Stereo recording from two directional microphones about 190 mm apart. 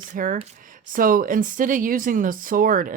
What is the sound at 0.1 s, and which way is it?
Speech, 40° right (ahead or behind).